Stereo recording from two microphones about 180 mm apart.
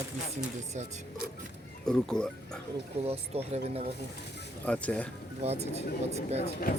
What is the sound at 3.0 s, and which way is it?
Speech, 35° right (ahead or behind).